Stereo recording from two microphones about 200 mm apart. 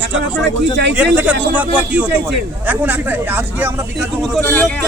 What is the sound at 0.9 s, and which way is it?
Speech, 10° right (ahead or behind).